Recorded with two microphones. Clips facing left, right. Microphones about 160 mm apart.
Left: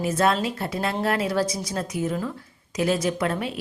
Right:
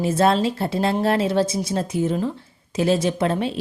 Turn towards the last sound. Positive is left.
turn(degrees=-30)  # may be behind; listen again after turning